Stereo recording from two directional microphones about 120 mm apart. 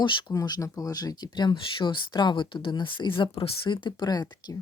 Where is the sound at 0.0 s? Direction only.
40° left (ahead or behind).